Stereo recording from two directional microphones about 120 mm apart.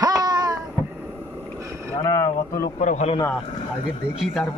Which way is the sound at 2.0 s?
25° left (ahead or behind).